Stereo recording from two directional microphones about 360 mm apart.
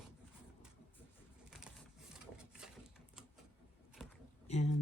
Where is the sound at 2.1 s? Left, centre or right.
Centre.